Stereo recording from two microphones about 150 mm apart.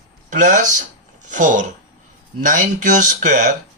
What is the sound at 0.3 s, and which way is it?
Speech, 60° right (ahead or behind).